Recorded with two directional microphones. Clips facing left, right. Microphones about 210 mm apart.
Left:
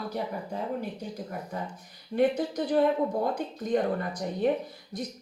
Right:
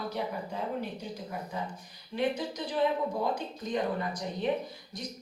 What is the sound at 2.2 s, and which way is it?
A woman's voice, 60° left (ahead or behind).